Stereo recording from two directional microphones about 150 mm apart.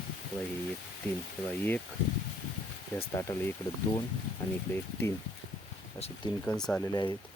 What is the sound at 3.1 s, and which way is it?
Speech, 20° left (ahead or behind).